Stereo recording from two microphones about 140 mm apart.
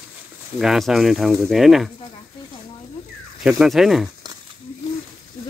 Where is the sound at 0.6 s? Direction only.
5° right (ahead or behind).